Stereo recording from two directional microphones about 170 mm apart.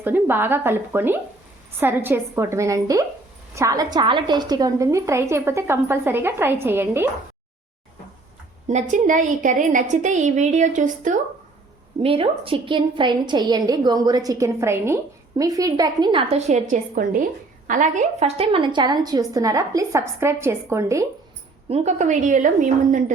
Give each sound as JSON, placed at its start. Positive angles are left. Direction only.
{"t": 0.0, "sound": "a woman's voice", "side_deg": -10}
{"t": 8.6, "sound": "a woman's voice", "side_deg": -45}
{"t": 12.0, "sound": "a woman's voice", "side_deg": -35}
{"t": 16.3, "sound": "a woman's voice", "side_deg": -40}
{"t": 21.7, "sound": "a woman's voice", "side_deg": -45}